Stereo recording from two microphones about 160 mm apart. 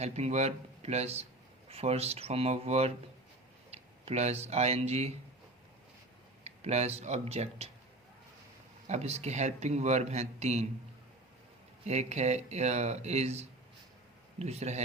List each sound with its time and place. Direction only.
0.0 s a man's voice: 45° right (ahead or behind)
6.4 s speech: 40° right (ahead or behind)
8.9 s a man's voice: 40° right (ahead or behind)
11.9 s a man's voice: 45° right (ahead or behind)